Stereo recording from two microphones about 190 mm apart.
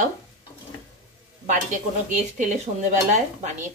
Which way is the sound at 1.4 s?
40° right (ahead or behind).